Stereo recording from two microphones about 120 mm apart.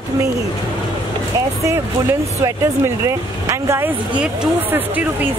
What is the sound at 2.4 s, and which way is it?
Speech, 25° right (ahead or behind).